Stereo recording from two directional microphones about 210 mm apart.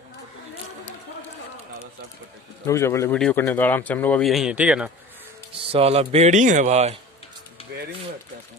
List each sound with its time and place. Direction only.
2.6 s a man's voice: 15° left (ahead or behind); by 4.9 s 5° right (ahead or behind)
5.5 s speech: 25° right (ahead or behind)